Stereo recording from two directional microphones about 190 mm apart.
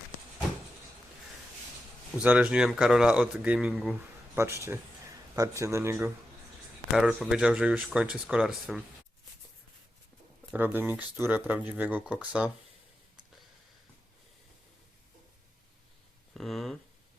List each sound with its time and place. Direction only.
2.1 s speech: 5° right (ahead or behind)
6.9 s speech: centre (ahead or behind)
10.5 s speech: 10° right (ahead or behind)
16.3 s speech: centre (ahead or behind)